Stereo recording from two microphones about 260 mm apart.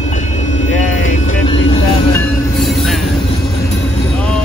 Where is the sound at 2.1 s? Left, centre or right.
Centre.